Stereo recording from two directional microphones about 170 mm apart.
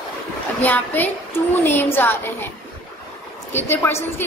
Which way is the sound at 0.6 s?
10° left (ahead or behind).